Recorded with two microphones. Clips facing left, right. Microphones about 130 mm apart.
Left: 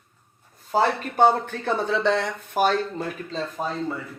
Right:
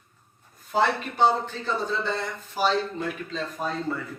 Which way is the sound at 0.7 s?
50° left (ahead or behind).